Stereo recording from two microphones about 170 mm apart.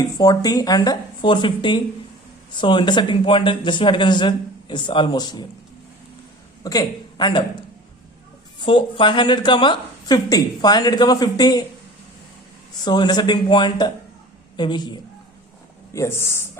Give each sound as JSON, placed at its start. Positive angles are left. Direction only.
{"t": 0.0, "sound": "a woman's voice", "side_deg": 25}
{"t": 6.6, "sound": "a man's voice", "side_deg": 20}
{"t": 8.6, "sound": "a woman's voice", "side_deg": 30}
{"t": 12.8, "sound": "a woman's voice", "side_deg": 25}